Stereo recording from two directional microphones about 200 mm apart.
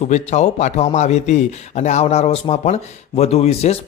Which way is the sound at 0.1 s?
35° left (ahead or behind).